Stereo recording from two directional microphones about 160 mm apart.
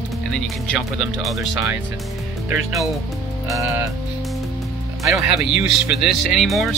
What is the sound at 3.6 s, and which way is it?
Speech, 20° right (ahead or behind).